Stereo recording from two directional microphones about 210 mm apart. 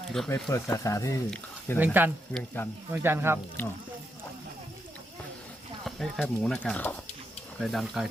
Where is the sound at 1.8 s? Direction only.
10° right (ahead or behind).